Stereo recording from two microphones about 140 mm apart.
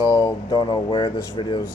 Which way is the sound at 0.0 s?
25° left (ahead or behind).